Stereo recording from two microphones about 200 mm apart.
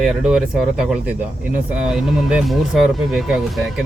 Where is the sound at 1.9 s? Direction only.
5° right (ahead or behind).